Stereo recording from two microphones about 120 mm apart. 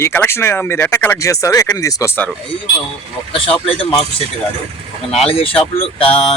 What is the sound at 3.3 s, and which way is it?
Speech, 50° left (ahead or behind).